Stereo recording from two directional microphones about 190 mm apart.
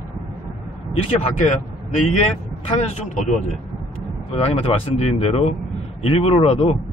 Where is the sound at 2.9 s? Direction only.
40° left (ahead or behind).